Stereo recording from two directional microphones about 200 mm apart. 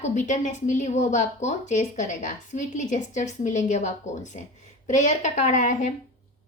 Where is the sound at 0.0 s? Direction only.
40° left (ahead or behind).